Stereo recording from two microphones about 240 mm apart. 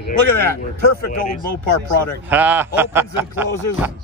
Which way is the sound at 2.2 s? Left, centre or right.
Centre.